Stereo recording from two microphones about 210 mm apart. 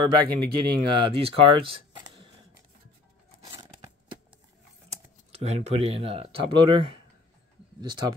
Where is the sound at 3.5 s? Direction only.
20° right (ahead or behind).